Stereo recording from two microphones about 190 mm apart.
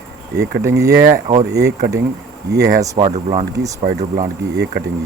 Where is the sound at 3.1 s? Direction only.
40° right (ahead or behind).